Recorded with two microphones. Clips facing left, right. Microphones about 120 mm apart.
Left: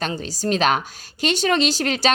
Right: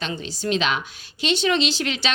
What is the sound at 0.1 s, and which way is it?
A woman's voice, 40° left (ahead or behind).